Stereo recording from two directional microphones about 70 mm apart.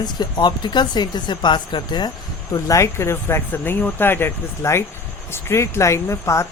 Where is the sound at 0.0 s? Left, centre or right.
Left.